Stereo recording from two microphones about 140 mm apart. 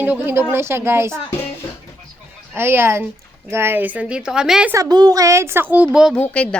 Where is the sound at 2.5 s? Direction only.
15° right (ahead or behind).